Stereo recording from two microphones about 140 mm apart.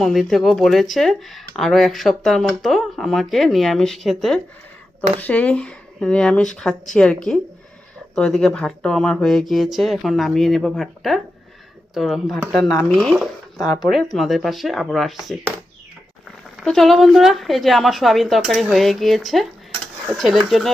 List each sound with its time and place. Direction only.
0.0 s speech: centre (ahead or behind)
13.6 s speech: 25° left (ahead or behind)
13.9 s speech: centre (ahead or behind)
16.6 s speech: centre (ahead or behind)